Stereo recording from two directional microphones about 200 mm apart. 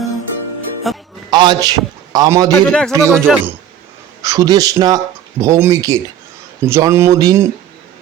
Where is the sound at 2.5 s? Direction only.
10° left (ahead or behind).